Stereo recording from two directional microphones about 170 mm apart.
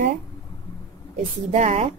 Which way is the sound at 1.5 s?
40° right (ahead or behind).